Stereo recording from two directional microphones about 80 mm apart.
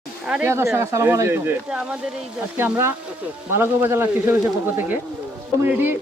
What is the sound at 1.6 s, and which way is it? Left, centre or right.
Speech, centre.